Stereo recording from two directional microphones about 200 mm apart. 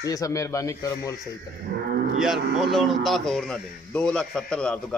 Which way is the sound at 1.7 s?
50° right (ahead or behind).